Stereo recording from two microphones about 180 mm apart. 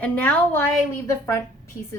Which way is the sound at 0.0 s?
10° left (ahead or behind).